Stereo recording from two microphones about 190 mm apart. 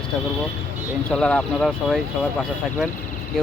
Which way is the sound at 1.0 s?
5° left (ahead or behind).